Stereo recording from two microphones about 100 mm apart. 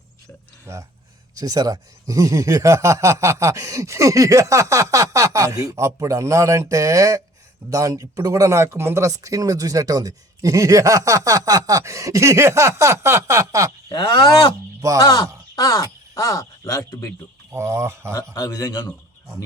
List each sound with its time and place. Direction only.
0.6 s speech: 30° right (ahead or behind)
14.1 s speech: 55° left (ahead or behind)
15.5 s speech: 35° left (ahead or behind)
17.5 s speech: 30° right (ahead or behind)
18.3 s a man's voice: 35° left (ahead or behind)